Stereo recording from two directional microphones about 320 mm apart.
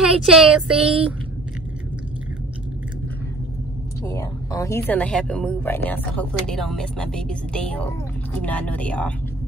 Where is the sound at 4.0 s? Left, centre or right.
Centre.